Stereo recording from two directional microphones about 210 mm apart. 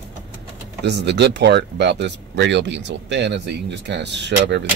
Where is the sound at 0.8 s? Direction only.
55° right (ahead or behind).